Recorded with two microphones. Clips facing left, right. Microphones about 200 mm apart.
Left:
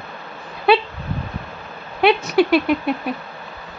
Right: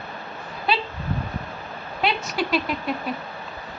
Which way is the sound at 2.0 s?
60° left (ahead or behind).